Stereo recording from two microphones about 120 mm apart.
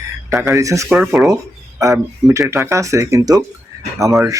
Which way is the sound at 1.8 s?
25° right (ahead or behind).